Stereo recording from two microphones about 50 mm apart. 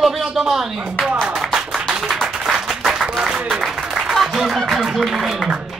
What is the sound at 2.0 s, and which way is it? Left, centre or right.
Applause, centre.